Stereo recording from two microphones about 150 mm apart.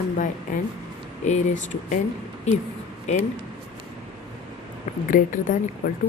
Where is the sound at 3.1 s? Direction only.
50° left (ahead or behind).